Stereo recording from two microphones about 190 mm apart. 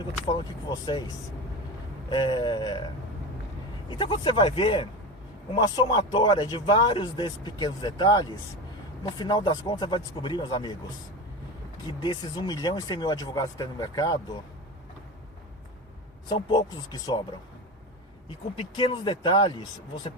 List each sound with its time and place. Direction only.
0.3 s speech: 25° left (ahead or behind)
11.9 s speech: 25° left (ahead or behind)
16.3 s speech: 25° left (ahead or behind)
18.3 s speech: 25° left (ahead or behind)